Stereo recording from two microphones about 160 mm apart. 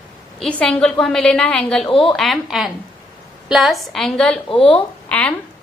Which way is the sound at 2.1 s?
Centre (ahead or behind).